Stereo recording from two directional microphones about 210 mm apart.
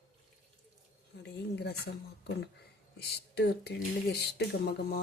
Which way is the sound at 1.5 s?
55° left (ahead or behind).